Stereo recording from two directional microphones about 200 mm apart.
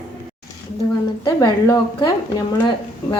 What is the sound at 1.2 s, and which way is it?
Speech, 20° left (ahead or behind).